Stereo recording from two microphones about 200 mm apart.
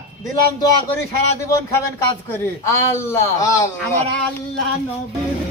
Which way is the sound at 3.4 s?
15° left (ahead or behind).